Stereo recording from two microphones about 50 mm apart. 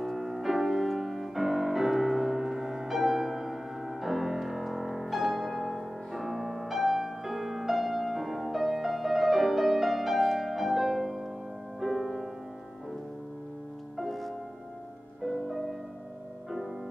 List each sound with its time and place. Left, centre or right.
0.0 s music: centre
13.9 s music: centre